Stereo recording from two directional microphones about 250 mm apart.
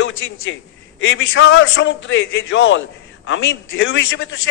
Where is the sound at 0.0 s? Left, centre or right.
Left.